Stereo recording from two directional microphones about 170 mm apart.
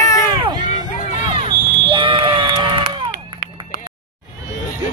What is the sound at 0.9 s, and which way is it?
Crowd, 45° left (ahead or behind).